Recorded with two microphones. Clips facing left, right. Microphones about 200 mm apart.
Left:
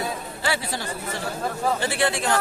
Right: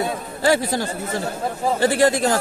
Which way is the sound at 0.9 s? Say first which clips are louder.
Right 4 dB; 25° right (ahead or behind).